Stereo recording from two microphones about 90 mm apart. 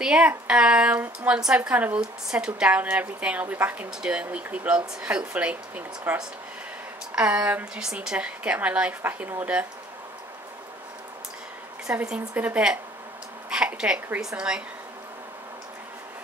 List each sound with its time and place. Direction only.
0.0 s a woman's voice: 10° right (ahead or behind)
11.9 s a woman's voice: 15° right (ahead or behind)